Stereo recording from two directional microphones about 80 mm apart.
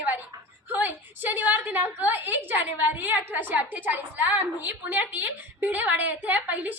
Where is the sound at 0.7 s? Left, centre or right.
Right.